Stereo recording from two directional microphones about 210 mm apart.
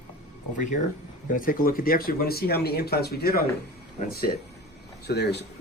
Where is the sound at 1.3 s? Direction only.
40° left (ahead or behind).